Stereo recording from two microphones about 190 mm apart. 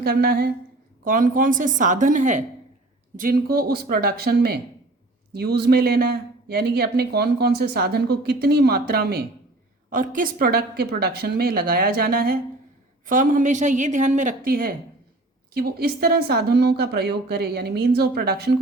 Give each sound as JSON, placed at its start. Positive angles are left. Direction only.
{"t": 0.0, "sound": "speech", "side_deg": -55}
{"t": 9.9, "sound": "speech", "side_deg": -45}